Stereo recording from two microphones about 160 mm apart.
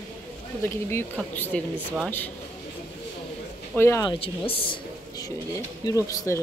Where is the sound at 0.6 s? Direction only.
10° left (ahead or behind).